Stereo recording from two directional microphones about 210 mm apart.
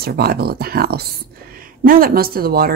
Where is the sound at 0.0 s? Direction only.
45° right (ahead or behind).